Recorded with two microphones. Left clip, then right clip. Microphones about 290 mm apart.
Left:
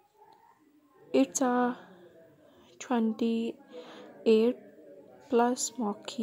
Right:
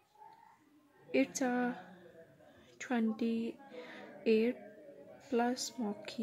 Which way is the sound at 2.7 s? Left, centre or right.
Centre.